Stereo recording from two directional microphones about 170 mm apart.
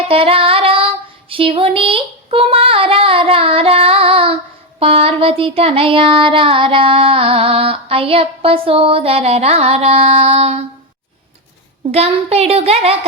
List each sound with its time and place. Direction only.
0.1 s female singing: 35° right (ahead or behind)
1.3 s child singing: 30° right (ahead or behind)
11.9 s child singing: 35° right (ahead or behind)